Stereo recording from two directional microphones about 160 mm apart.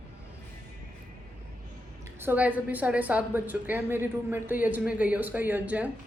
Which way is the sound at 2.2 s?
10° right (ahead or behind).